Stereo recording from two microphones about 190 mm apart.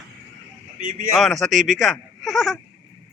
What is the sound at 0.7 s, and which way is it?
Speech, 45° right (ahead or behind).